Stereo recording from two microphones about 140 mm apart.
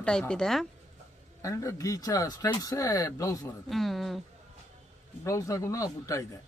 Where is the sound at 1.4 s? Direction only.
20° left (ahead or behind).